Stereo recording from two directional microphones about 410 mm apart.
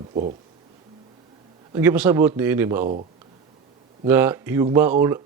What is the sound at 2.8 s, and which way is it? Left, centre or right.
Speech, centre.